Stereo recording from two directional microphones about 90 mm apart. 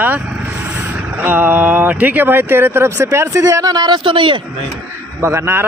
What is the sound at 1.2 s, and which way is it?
Speech, 20° right (ahead or behind).